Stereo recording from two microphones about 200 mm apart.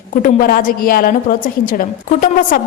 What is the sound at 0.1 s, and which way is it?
A woman's voice, 45° left (ahead or behind).